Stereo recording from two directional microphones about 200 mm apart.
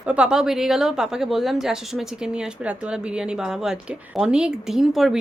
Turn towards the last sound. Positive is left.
turn(degrees=0)  # may be behind; listen again after turning